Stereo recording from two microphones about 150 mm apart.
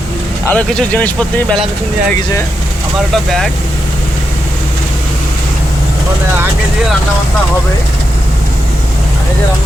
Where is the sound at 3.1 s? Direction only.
Centre (ahead or behind).